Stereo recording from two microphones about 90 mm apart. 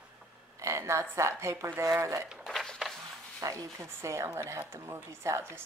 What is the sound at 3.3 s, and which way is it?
Speech, 40° right (ahead or behind).